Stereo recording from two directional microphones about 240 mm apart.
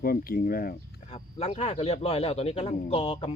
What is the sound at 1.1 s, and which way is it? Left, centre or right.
Speech, left.